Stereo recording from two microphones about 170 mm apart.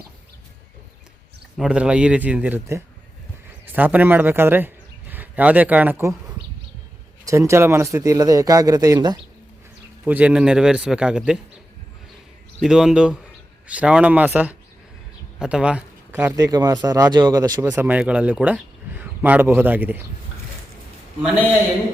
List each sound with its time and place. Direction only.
1.5 s a man's voice: 5° right (ahead or behind); by 9.1 s 20° right (ahead or behind)
10.0 s a man's voice: 10° right (ahead or behind)
12.6 s a man's voice: 5° right (ahead or behind)